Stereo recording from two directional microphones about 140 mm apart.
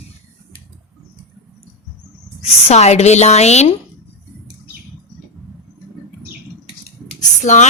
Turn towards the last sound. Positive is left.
turn(degrees=60)  # may be behind; listen again after turning